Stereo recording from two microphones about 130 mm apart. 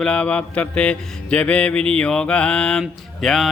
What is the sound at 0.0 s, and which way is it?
Speech, 10° left (ahead or behind).